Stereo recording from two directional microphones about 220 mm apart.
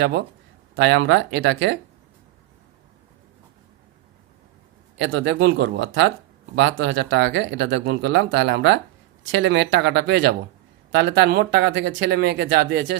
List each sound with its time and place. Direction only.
0.8 s speech: 55° right (ahead or behind)
4.9 s speech: 55° right (ahead or behind)